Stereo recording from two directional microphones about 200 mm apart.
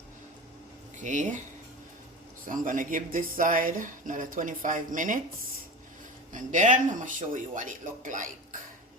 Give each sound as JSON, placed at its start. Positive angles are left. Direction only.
{"t": 0.9, "sound": "speech", "side_deg": -40}
{"t": 2.5, "sound": "speech", "side_deg": -40}
{"t": 6.3, "sound": "speech", "side_deg": -40}